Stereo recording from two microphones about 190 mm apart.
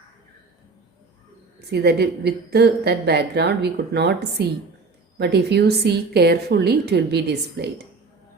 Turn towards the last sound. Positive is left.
turn(degrees=-60)  # may be behind; listen again after turning